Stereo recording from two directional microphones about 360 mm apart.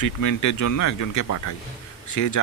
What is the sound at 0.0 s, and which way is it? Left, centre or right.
Speech, left.